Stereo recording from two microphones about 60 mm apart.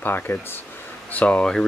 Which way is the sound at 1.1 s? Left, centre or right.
Left.